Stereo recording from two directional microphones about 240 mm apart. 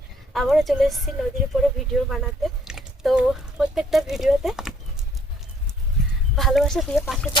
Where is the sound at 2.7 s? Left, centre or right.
Centre.